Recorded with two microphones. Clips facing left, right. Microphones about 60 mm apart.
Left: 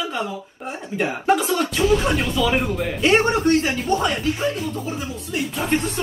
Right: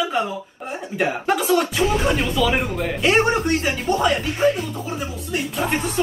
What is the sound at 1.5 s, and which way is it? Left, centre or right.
Speech, centre.